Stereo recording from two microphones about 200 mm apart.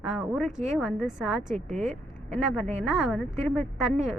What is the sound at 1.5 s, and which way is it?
Speech, 35° right (ahead or behind).